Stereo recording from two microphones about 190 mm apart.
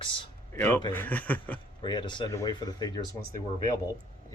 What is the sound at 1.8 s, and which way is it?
Speech, 25° left (ahead or behind).